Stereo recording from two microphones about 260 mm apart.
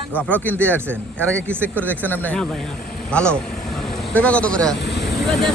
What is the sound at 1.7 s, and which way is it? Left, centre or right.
Speech, centre.